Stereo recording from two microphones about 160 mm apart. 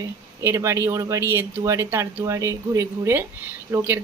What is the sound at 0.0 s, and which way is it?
Speech, 20° right (ahead or behind).